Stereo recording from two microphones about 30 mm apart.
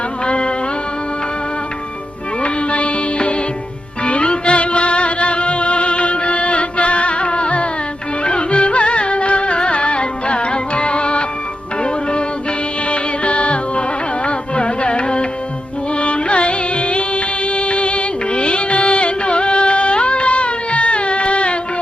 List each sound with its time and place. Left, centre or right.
0.3 s music: left
2.4 s music: left
12.9 s music: left